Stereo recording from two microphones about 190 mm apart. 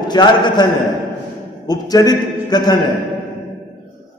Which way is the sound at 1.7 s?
20° left (ahead or behind).